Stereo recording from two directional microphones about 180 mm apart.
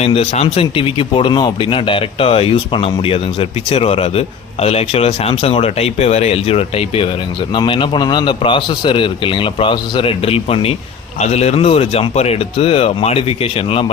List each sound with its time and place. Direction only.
0.0 s a man's voice: 35° left (ahead or behind)